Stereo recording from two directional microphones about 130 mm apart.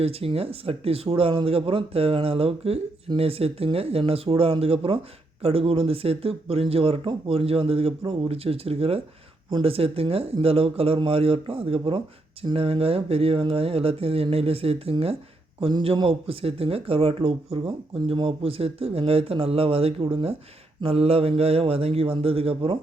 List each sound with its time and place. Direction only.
0.0 s speech: 50° right (ahead or behind)